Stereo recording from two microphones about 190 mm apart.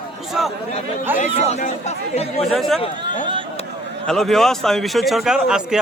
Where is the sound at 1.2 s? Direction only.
40° left (ahead or behind).